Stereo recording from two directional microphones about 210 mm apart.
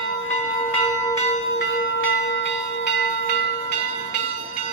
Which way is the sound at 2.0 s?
60° left (ahead or behind).